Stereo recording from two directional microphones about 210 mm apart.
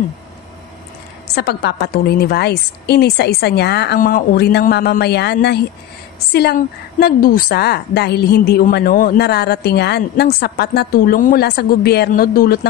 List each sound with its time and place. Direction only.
1.3 s a woman's voice: 50° left (ahead or behind)